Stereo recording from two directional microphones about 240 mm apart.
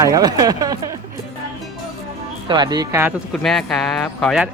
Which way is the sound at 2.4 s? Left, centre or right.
Centre.